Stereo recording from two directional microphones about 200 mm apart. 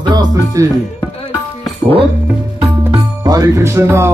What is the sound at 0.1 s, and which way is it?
Speech, 20° right (ahead or behind).